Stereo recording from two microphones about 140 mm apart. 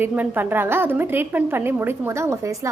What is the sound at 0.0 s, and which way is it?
A woman's voice, 15° right (ahead or behind).